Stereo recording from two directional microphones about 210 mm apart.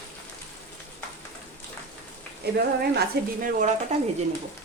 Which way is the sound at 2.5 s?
45° right (ahead or behind).